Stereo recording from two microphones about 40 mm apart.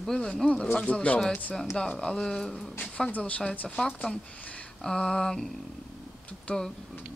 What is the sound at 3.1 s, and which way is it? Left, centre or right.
Speech, left.